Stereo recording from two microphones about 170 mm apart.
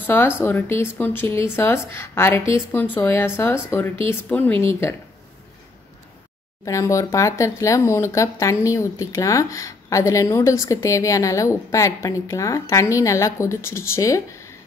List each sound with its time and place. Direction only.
0.0 s speech: 10° left (ahead or behind)
6.6 s speech: 20° left (ahead or behind)